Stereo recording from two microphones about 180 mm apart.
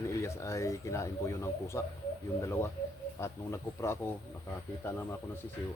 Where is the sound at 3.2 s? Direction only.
15° left (ahead or behind).